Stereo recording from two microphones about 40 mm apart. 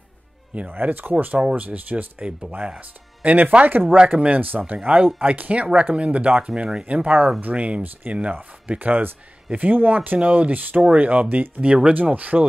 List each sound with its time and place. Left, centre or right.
0.7 s speech: right
1.5 s speech: right
4.8 s speech: right
8.7 s speech: right
10.1 s speech: right
10.5 s speech: right
10.8 s speech: right
11.2 s speech: right
11.6 s speech: right